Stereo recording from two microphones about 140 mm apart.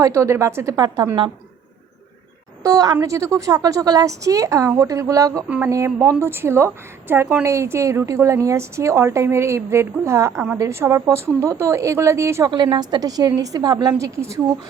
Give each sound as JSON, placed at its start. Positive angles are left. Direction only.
{"t": 0.0, "sound": "a woman's voice", "side_deg": -20}
{"t": 2.6, "sound": "a woman's voice", "side_deg": -25}
{"t": 12.5, "sound": "a woman's voice", "side_deg": -35}